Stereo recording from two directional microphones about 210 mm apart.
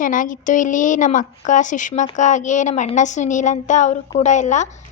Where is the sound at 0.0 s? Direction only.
40° left (ahead or behind).